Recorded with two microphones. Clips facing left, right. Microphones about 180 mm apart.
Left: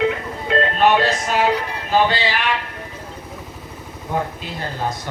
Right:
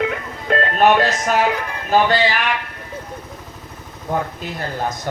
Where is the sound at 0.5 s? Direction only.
50° right (ahead or behind).